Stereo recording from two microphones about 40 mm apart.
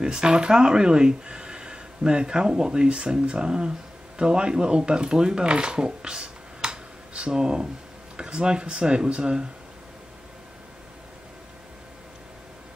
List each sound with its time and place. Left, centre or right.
0.0 s speech: centre